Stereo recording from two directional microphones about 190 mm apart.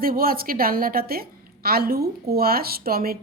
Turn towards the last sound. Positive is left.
turn(degrees=-50)  # may be behind; listen again after turning